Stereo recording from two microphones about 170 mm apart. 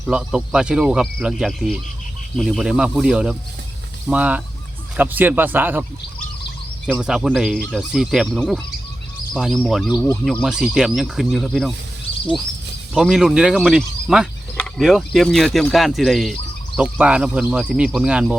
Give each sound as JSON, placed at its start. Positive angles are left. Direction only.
{"t": 0.1, "sound": "speech", "side_deg": -5}
{"t": 6.9, "sound": "speech", "side_deg": -5}
{"t": 12.9, "sound": "speech", "side_deg": -5}